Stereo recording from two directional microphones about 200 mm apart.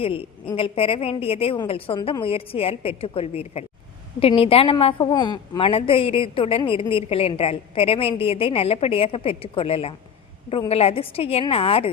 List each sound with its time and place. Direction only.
0.0 s a woman's voice: 25° left (ahead or behind)